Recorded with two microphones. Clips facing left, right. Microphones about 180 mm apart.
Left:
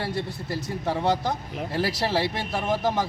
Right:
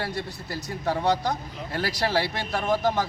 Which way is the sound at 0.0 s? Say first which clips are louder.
Left 2 dB; 25° left (ahead or behind).